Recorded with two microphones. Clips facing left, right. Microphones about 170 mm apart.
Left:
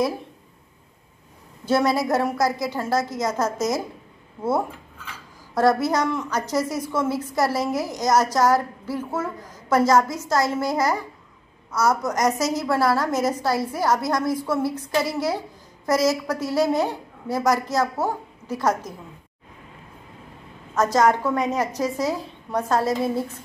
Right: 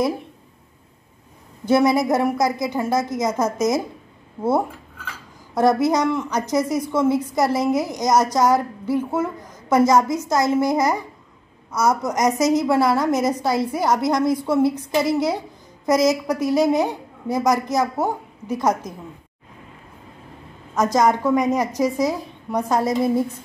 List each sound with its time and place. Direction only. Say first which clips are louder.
1.7 s a woman's voice: right 3 dB; 15° right (ahead or behind)
20.7 s a woman's voice: right 1 dB; 15° right (ahead or behind)